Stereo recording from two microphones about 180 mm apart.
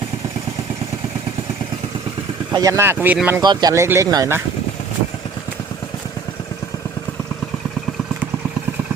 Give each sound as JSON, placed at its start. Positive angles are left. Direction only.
{"t": 2.5, "sound": "speech", "side_deg": -20}
{"t": 3.4, "sound": "speech", "side_deg": -25}